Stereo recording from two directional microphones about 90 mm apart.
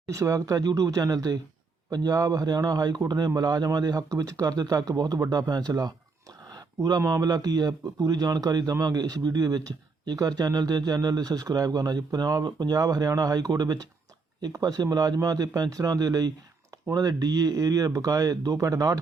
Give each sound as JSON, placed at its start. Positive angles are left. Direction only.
{"t": 0.1, "sound": "speech", "side_deg": -35}
{"t": 7.1, "sound": "speech", "side_deg": -45}